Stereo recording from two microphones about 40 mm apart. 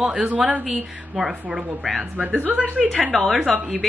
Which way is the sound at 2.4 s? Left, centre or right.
Right.